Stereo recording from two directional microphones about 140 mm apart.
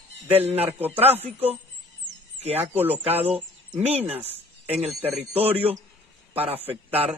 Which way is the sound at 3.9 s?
45° right (ahead or behind).